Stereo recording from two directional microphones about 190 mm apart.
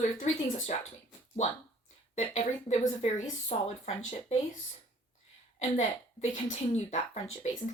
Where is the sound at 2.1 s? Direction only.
35° left (ahead or behind).